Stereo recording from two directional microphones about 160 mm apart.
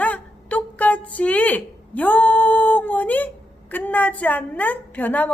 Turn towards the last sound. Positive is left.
turn(degrees=10)  # may be behind; listen again after turning